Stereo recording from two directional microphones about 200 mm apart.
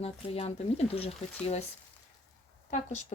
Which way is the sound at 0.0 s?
30° left (ahead or behind).